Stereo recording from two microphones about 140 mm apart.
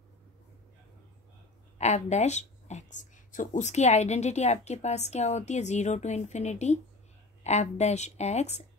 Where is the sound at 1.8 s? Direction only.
55° left (ahead or behind).